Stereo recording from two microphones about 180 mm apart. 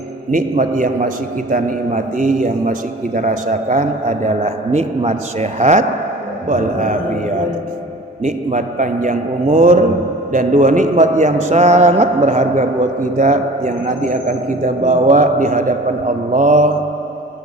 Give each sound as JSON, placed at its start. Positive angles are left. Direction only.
{"t": 0.3, "sound": "a man's voice", "side_deg": -50}